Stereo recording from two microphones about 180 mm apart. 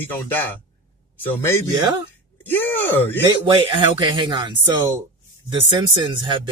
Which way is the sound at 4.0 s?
25° right (ahead or behind).